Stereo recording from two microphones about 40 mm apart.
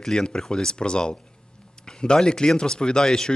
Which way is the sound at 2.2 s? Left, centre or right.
Centre.